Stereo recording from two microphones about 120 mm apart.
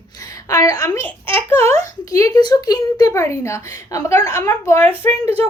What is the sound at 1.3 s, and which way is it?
Speech, 45° right (ahead or behind).